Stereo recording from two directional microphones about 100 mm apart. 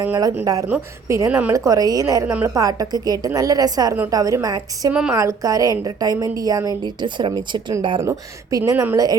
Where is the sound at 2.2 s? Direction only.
25° right (ahead or behind).